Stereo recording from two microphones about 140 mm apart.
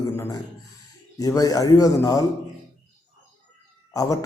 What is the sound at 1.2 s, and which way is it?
A man's voice, 25° left (ahead or behind).